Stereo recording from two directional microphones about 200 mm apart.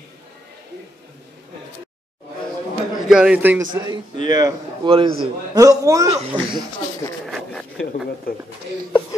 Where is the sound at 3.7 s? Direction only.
25° right (ahead or behind).